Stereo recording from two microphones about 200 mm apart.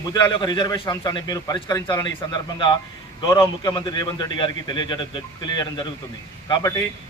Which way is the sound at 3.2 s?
20° left (ahead or behind).